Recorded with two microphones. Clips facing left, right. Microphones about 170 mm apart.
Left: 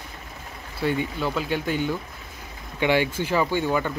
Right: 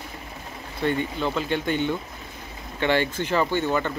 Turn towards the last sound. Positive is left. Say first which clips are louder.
# even
turn(degrees=10)  # may be behind; listen again after turning